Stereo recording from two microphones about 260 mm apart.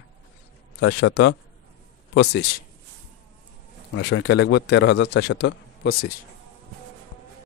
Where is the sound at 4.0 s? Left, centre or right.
Left.